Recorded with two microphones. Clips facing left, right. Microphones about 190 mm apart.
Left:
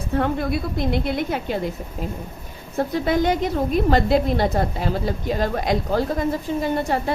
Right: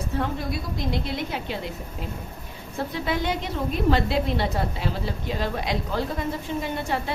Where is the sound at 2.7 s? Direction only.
45° left (ahead or behind).